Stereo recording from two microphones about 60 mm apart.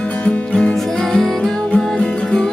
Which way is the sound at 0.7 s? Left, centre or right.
Centre.